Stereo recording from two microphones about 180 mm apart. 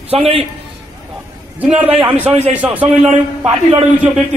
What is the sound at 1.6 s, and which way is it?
A man's voice, 10° right (ahead or behind).